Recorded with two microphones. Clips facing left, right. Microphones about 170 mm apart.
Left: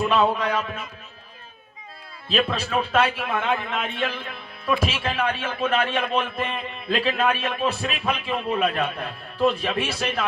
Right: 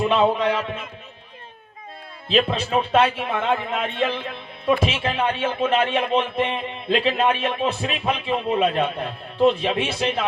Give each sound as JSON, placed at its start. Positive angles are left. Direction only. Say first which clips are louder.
{"t": 0.1, "sound": "a man's voice", "louder": "right 2 dB", "side_deg": -25}
{"t": 2.3, "sound": "a man's voice", "louder": "right 3 dB", "side_deg": -25}